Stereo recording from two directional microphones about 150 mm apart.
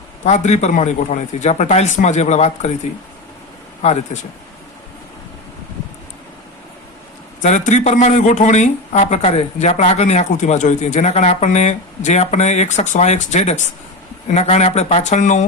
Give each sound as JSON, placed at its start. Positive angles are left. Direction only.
{"t": 0.3, "sound": "speech", "side_deg": 50}
{"t": 4.1, "sound": "speech", "side_deg": 45}
{"t": 7.4, "sound": "speech", "side_deg": 55}